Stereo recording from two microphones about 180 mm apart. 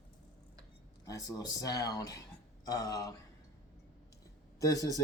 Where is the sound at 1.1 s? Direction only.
20° left (ahead or behind).